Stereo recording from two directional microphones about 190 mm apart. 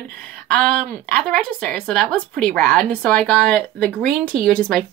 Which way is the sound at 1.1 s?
5° left (ahead or behind).